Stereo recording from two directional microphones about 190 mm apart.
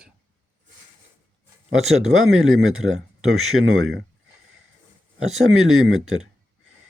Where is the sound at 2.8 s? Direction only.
90° right.